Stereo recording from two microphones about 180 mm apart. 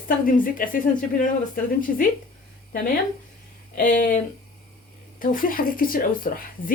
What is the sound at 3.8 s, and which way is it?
Speech, 45° left (ahead or behind).